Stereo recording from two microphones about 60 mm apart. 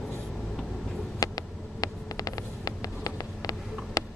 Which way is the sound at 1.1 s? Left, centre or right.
Left.